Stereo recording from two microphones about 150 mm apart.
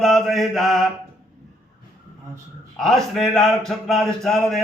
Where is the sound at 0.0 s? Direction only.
Centre (ahead or behind).